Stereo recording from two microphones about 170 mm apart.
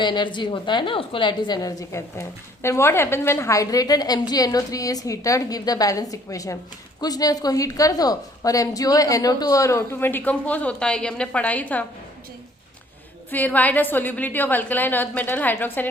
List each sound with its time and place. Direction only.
0.0 s a woman's voice: 25° left (ahead or behind); by 11.9 s 10° left (ahead or behind)
13.3 s a woman's voice: 10° left (ahead or behind)